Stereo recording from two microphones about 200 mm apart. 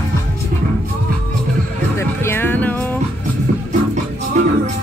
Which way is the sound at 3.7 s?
35° right (ahead or behind).